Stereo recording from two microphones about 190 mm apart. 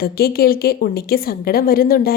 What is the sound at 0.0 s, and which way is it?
A woman's voice, 55° left (ahead or behind).